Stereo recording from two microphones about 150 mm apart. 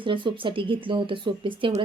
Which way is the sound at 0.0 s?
35° right (ahead or behind).